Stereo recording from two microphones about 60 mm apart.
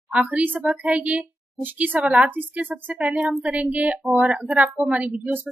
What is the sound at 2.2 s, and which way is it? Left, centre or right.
Speech, right.